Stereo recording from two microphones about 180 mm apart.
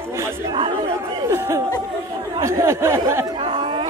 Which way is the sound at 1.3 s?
15° right (ahead or behind).